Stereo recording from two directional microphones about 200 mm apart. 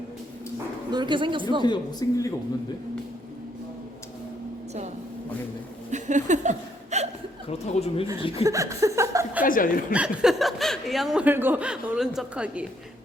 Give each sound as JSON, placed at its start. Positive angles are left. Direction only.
{"t": 0.9, "sound": "speech", "side_deg": -20}
{"t": 1.6, "sound": "a woman's voice", "side_deg": 20}
{"t": 5.9, "sound": "speech", "side_deg": -35}
{"t": 7.4, "sound": "a woman's voice", "side_deg": 30}
{"t": 8.4, "sound": "chuckle", "side_deg": -15}
{"t": 9.4, "sound": "a woman's voice", "side_deg": 45}
{"t": 9.9, "sound": "speech", "side_deg": -5}